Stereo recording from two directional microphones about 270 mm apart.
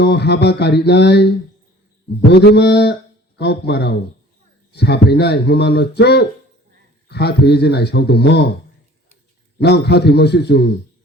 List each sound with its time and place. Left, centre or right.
0.0 s speech: left
2.3 s speech: left
9.6 s speech: left